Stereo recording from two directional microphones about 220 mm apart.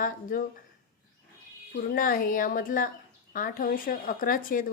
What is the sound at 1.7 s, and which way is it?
A woman's voice, 40° left (ahead or behind).